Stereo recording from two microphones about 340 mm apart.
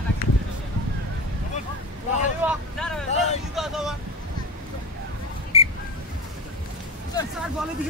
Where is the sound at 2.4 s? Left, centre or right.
Centre.